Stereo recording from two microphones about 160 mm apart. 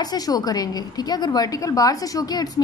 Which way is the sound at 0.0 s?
25° left (ahead or behind).